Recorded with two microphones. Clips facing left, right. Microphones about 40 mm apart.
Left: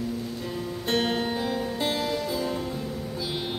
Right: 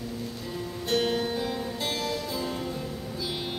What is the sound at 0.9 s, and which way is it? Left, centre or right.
Music, left.